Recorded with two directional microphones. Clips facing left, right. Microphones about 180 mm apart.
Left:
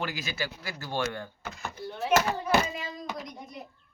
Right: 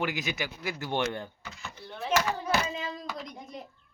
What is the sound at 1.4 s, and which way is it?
Door, 55° left (ahead or behind).